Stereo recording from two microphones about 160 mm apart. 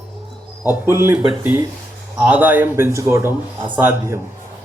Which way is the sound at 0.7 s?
15° right (ahead or behind).